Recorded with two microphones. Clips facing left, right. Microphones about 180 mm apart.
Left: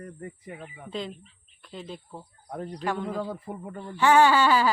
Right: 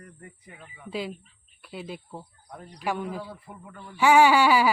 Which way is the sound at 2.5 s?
45° left (ahead or behind).